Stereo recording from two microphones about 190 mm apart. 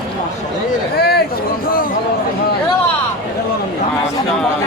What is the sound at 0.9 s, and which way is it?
Speech, 55° left (ahead or behind).